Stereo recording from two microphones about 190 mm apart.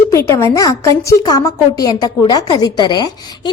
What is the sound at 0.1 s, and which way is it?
Speech, 15° left (ahead or behind).